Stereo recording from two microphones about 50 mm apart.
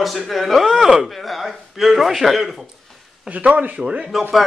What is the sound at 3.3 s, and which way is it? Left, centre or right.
Speech, right.